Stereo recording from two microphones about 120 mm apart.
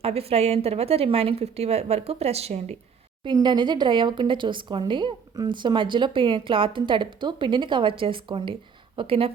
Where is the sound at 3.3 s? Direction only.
40° right (ahead or behind).